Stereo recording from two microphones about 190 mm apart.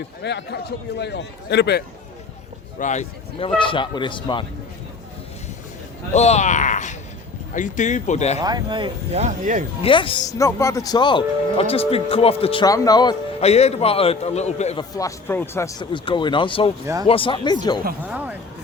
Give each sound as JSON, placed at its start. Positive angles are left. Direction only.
{"t": 0.2, "sound": "a man's voice", "side_deg": 65}
{"t": 2.7, "sound": "a man's voice", "side_deg": 40}
{"t": 6.1, "sound": "a man's voice", "side_deg": 35}
{"t": 8.4, "sound": "speech", "side_deg": -20}
{"t": 9.2, "sound": "speech", "side_deg": -40}
{"t": 9.8, "sound": "speech", "side_deg": 25}
{"t": 13.4, "sound": "a man's voice", "side_deg": 35}
{"t": 14.8, "sound": "speech", "side_deg": 20}
{"t": 16.8, "sound": "speech", "side_deg": -15}
{"t": 17.1, "sound": "speech", "side_deg": 25}